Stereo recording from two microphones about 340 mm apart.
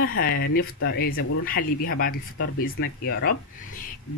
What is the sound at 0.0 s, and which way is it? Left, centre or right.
Speech, left.